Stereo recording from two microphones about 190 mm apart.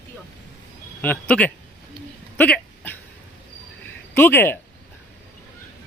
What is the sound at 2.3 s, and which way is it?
Hiccup, 10° left (ahead or behind).